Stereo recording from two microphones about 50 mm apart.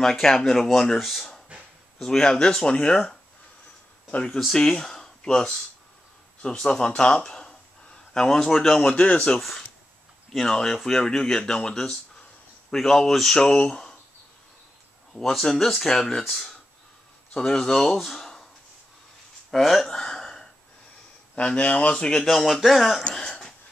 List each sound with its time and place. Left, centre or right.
0.0 s speech: centre
1.5 s a sound: right
2.0 s speech: centre
8.9 s speech: left
9.4 s speech: centre
15.1 s speech: centre
17.3 s speech: centre
19.5 s a sound: centre
21.4 s speech: left
22.2 s speech: centre